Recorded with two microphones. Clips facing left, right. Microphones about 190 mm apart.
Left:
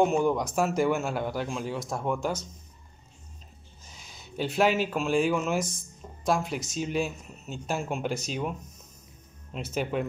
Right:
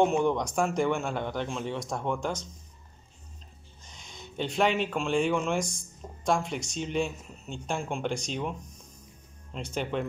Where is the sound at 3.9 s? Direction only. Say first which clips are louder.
Even; 5° left (ahead or behind).